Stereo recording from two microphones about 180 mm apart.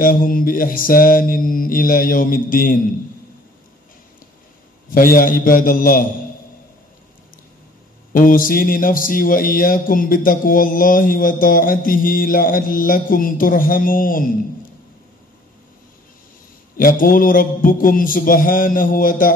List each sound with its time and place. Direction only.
0.0 s speech: 50° left (ahead or behind)
4.8 s speech: 50° left (ahead or behind)
8.1 s speech: 50° left (ahead or behind)
16.7 s speech: 50° left (ahead or behind)